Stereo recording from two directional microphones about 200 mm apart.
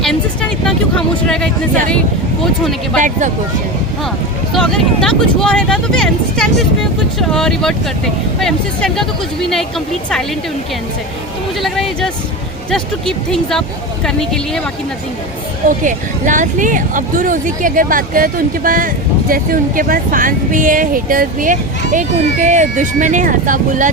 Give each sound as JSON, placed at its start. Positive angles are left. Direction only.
{"t": 0.0, "sound": "vehicle", "side_deg": 5}
{"t": 2.4, "sound": "speech", "side_deg": 0}
{"t": 3.0, "sound": "speech", "side_deg": -40}
{"t": 4.5, "sound": "speech", "side_deg": 0}
{"t": 11.6, "sound": "speech", "side_deg": 0}
{"t": 15.8, "sound": "speech", "side_deg": -40}